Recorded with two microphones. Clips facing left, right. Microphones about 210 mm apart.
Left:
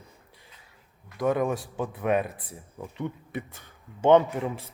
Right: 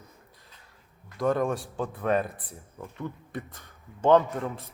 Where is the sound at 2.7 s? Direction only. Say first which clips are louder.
Left 3 dB; 15° left (ahead or behind).